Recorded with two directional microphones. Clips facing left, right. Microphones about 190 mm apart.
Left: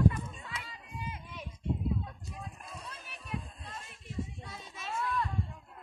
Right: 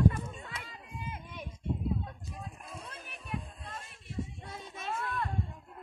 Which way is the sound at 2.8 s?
55° right (ahead or behind).